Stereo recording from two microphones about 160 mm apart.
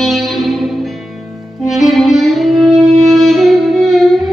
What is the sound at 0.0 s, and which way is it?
Music, centre (ahead or behind).